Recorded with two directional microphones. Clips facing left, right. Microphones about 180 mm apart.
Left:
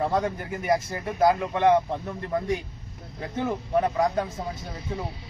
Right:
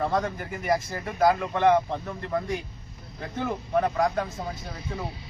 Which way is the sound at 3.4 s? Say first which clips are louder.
Left 1 dB; 15° left (ahead or behind).